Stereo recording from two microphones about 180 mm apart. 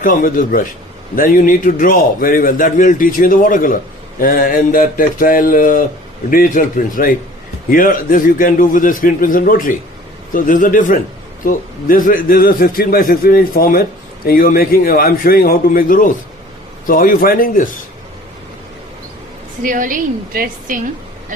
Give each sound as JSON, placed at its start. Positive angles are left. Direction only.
{"t": 0.0, "sound": "a man's voice", "side_deg": 50}
{"t": 19.6, "sound": "a woman's voice", "side_deg": -50}